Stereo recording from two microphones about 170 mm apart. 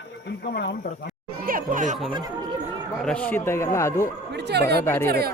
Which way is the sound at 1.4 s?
55° right (ahead or behind).